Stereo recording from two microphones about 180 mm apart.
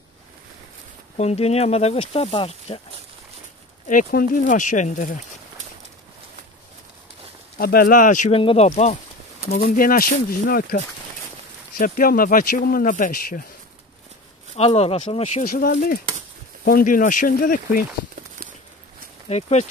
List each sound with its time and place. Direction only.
1.1 s speech: 35° left (ahead or behind)
3.9 s speech: 50° left (ahead or behind)
7.5 s speech: 55° left (ahead or behind)
8.4 s speech: 35° left (ahead or behind)
9.5 s speech: 50° left (ahead or behind)
11.8 s speech: 50° left (ahead or behind)
14.5 s speech: 35° left (ahead or behind)
15.4 s speech: 55° left (ahead or behind)
19.2 s speech: 40° left (ahead or behind)